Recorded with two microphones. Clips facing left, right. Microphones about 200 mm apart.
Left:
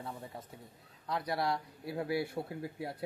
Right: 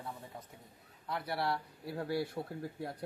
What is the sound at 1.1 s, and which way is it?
Speech, 15° left (ahead or behind).